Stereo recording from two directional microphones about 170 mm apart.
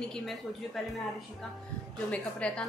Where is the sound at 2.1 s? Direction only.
5° left (ahead or behind).